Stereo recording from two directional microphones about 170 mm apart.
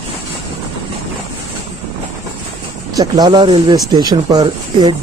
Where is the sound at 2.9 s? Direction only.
25° right (ahead or behind).